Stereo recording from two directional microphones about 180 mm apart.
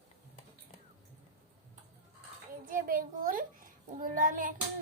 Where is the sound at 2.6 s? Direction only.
50° right (ahead or behind).